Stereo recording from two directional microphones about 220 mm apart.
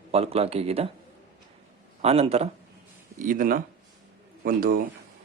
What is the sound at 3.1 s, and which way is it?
Speech, 40° right (ahead or behind).